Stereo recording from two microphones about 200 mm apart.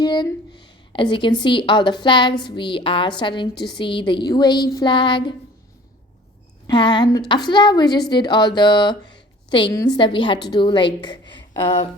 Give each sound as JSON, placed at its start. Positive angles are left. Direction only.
{"t": 0.0, "sound": "a woman's voice", "side_deg": 20}
{"t": 6.7, "sound": "speech", "side_deg": 25}